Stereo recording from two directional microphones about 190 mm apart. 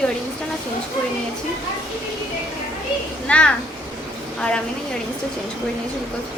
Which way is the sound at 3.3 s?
5° left (ahead or behind).